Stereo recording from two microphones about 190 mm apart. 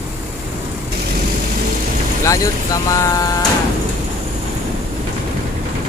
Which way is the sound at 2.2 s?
15° left (ahead or behind).